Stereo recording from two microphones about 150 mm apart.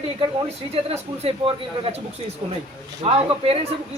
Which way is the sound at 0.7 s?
40° right (ahead or behind).